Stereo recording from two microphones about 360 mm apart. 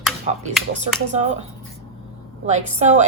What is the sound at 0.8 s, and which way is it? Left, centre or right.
Speech, centre.